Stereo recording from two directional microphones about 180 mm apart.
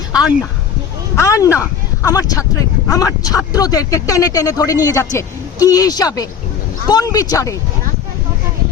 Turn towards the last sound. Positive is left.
turn(degrees=20)  # may be behind; listen again after turning